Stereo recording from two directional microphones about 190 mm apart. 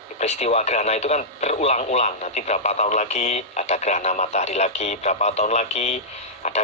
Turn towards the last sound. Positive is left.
turn(degrees=35)  # may be behind; listen again after turning